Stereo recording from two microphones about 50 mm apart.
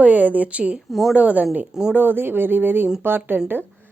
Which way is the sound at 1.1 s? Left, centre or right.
Right.